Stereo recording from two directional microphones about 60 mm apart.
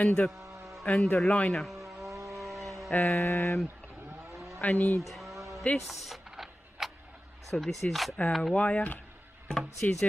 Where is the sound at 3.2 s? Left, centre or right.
Left.